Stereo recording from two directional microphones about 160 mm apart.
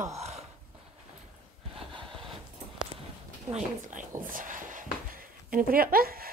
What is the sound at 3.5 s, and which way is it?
Speech, 55° right (ahead or behind).